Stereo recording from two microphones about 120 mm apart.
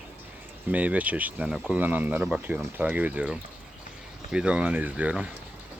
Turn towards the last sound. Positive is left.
turn(degrees=-10)  # may be behind; listen again after turning